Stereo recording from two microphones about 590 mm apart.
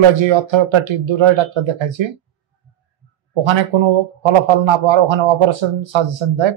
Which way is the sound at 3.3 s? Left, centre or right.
Right.